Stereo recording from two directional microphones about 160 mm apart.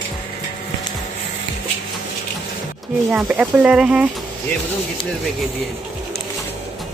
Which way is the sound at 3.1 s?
5° right (ahead or behind).